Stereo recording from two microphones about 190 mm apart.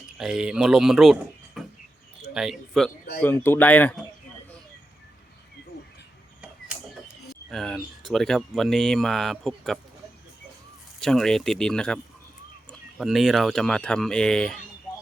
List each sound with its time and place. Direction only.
0.2 s speech: 5° right (ahead or behind)
3.2 s speech: 10° left (ahead or behind)
7.5 s speech: centre (ahead or behind)
11.0 s speech: centre (ahead or behind)
13.0 s speech: centre (ahead or behind)